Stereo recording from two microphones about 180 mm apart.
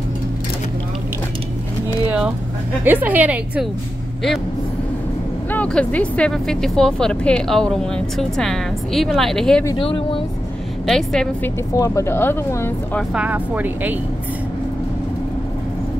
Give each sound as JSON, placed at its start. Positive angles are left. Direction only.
{"t": 2.0, "sound": "vehicle", "side_deg": -5}
{"t": 2.8, "sound": "a woman's voice", "side_deg": -10}
{"t": 5.5, "sound": "speech", "side_deg": 5}
{"t": 9.8, "sound": "speech", "side_deg": 30}
{"t": 10.9, "sound": "speech", "side_deg": 5}
{"t": 11.7, "sound": "speech", "side_deg": 15}
{"t": 13.1, "sound": "a woman's voice", "side_deg": -10}